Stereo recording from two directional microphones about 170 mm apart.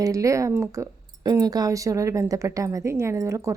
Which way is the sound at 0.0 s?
20° right (ahead or behind).